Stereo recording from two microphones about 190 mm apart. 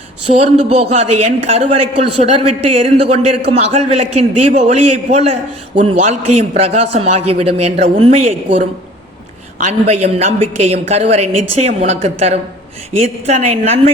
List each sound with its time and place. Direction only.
0.3 s a man's voice: 35° right (ahead or behind)
9.6 s a man's voice: 35° right (ahead or behind)